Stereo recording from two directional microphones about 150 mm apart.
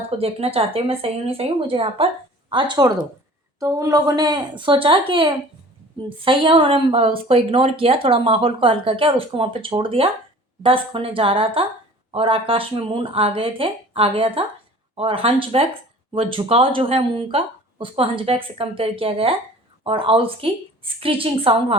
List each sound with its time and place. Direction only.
0.2 s speech: 40° right (ahead or behind)